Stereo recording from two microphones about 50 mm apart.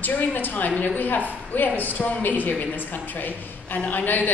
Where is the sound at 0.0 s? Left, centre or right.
Left.